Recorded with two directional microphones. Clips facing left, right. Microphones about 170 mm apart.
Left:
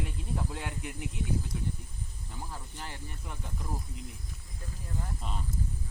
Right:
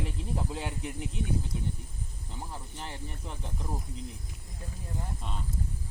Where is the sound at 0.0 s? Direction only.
25° right (ahead or behind).